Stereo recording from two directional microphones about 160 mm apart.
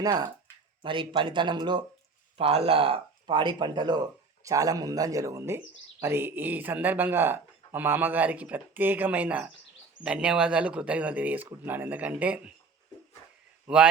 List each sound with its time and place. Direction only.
0.0 s speech: 25° right (ahead or behind); by 12.5 s 10° right (ahead or behind)
13.7 s a man's voice: 5° right (ahead or behind)